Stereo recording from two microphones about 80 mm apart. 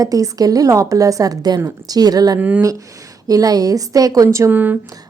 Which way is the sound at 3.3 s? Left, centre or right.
Right.